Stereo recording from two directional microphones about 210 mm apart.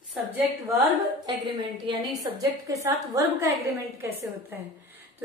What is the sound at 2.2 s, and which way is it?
A woman's voice, 15° right (ahead or behind).